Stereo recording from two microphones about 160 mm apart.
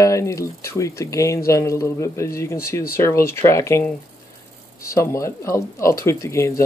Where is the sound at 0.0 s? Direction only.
20° left (ahead or behind).